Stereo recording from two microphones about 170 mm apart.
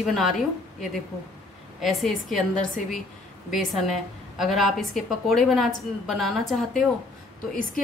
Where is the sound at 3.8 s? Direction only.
Centre (ahead or behind).